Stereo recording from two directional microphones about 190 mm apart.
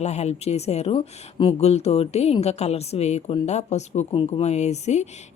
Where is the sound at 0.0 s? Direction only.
35° left (ahead or behind).